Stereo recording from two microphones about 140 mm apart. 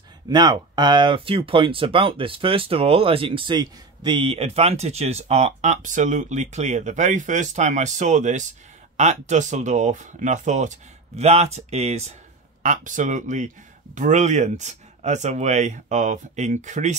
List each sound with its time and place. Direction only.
0.3 s speech: 30° right (ahead or behind); by 12.2 s 50° right (ahead or behind)
12.6 s speech: 60° right (ahead or behind)